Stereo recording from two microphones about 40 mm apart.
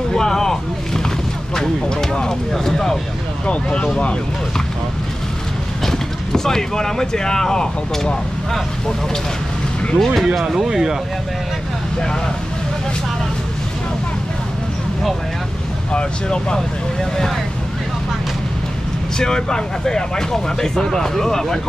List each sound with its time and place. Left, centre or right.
0.1 s a sound: centre
1.5 s speech: centre
3.4 s speech: left
5.9 s speech: centre
9.9 s speech: centre
10.5 s speech: centre
15.9 s speech: left
19.1 s speech: centre